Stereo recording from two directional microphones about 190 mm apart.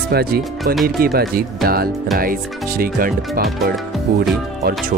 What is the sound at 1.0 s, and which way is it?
Speech, 55° right (ahead or behind).